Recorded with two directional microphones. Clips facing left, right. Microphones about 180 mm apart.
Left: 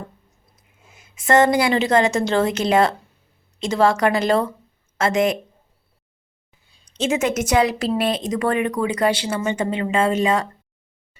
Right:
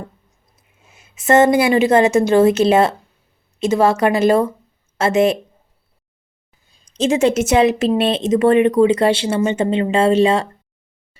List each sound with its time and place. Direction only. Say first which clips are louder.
0.5 s a woman's voice: even; 25° right (ahead or behind)
6.9 s a woman's voice: right 5 dB; 35° right (ahead or behind)